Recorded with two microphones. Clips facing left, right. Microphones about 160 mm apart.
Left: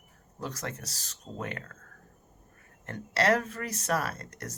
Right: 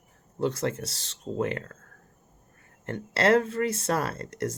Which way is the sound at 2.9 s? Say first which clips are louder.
Right 4 dB; 30° right (ahead or behind).